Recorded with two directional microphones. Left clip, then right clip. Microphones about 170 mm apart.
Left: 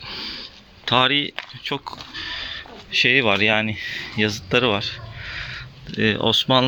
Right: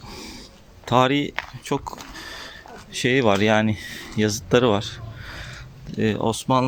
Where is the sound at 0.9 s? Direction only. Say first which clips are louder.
Left 1 dB; 15° right (ahead or behind).